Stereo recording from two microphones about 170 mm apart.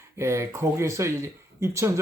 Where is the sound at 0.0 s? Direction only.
15° right (ahead or behind).